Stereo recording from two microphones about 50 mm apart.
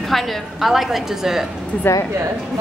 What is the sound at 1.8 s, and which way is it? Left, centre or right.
Speech, left.